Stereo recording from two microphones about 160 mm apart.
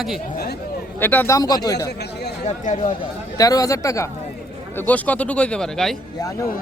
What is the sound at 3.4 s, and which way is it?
A man's voice, 20° left (ahead or behind).